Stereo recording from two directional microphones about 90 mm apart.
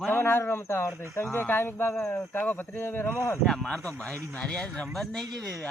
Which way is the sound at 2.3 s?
20° left (ahead or behind).